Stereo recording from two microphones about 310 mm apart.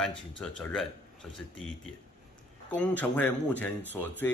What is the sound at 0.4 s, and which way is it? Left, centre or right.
Speech, centre.